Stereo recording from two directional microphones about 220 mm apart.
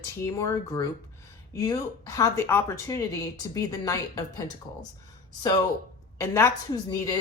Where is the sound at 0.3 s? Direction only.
15° left (ahead or behind).